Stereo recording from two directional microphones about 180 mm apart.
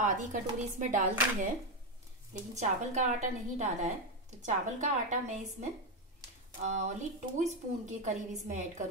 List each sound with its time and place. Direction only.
0.0 s a woman's voice: 45° right (ahead or behind)
2.5 s a woman's voice: 40° right (ahead or behind)